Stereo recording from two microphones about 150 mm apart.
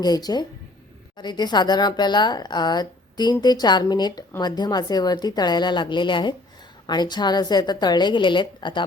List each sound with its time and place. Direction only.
0.0 s a woman's voice: 25° left (ahead or behind)